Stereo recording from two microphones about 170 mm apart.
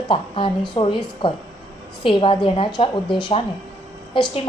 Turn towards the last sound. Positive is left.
turn(degrees=30)  # may be behind; listen again after turning